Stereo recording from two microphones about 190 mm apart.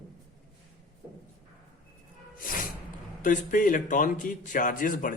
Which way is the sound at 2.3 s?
45° left (ahead or behind).